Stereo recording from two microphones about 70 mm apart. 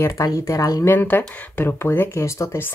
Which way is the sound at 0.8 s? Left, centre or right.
Left.